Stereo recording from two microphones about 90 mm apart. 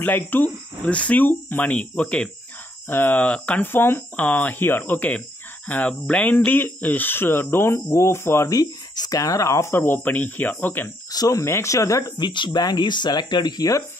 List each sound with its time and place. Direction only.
0.0 s speech: 20° left (ahead or behind)
8.5 s speech: 45° left (ahead or behind); by 10.9 s 20° left (ahead or behind)
11.1 s speech: 40° left (ahead or behind)
11.4 s speech: 30° left (ahead or behind)
12.2 s speech: 55° left (ahead or behind)